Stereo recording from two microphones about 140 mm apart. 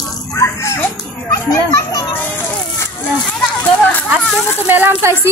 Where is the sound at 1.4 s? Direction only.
25° left (ahead or behind).